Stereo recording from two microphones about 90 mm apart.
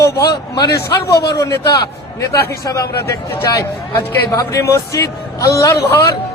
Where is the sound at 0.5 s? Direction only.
50° left (ahead or behind).